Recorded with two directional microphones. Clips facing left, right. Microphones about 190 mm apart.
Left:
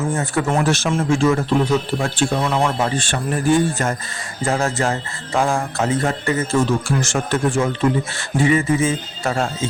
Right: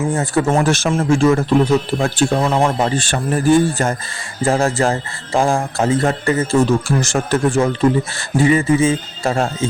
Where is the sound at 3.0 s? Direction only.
40° right (ahead or behind).